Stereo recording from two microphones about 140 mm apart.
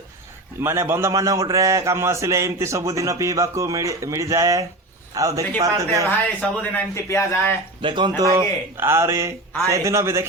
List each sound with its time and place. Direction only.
0.6 s a man's voice: 15° right (ahead or behind)
6.1 s speech: 10° left (ahead or behind)
6.9 s speech: 20° left (ahead or behind)
7.8 s a man's voice: 35° right (ahead or behind); by 10.2 s 20° right (ahead or behind)